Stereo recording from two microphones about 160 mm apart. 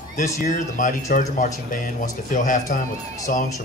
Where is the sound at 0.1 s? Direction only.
55° left (ahead or behind).